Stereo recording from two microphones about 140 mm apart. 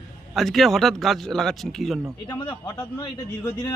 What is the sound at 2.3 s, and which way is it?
Speech, 30° left (ahead or behind).